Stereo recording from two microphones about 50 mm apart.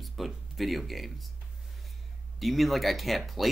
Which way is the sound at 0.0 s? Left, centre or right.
Centre.